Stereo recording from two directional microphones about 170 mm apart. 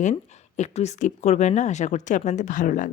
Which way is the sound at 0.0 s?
45° left (ahead or behind).